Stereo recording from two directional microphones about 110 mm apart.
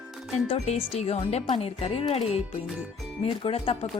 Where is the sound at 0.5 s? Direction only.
75° left (ahead or behind).